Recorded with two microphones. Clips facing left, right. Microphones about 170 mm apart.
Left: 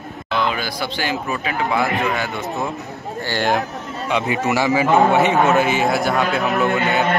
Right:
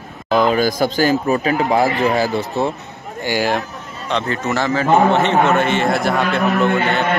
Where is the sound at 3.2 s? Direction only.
10° right (ahead or behind).